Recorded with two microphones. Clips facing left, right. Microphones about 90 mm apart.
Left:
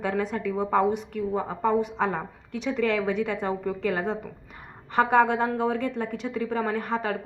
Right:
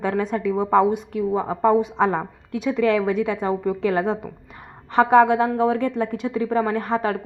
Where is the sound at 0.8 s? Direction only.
5° right (ahead or behind).